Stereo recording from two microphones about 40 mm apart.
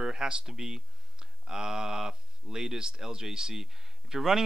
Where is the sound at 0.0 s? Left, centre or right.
Centre.